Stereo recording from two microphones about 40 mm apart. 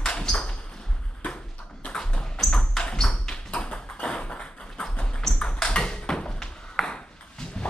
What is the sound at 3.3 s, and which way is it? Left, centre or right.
Tap, left.